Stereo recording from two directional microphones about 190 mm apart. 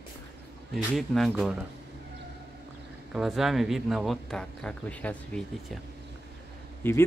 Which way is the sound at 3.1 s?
Centre (ahead or behind).